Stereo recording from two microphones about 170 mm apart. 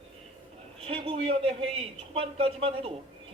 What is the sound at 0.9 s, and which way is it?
A woman's voice, 35° right (ahead or behind).